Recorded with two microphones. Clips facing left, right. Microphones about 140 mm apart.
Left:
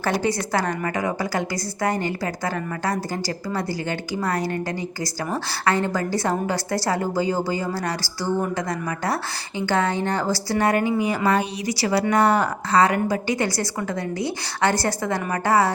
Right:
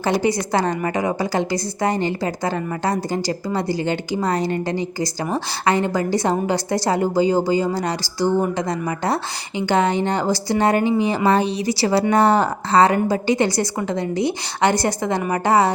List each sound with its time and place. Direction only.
0.0 s a woman's voice: 15° right (ahead or behind)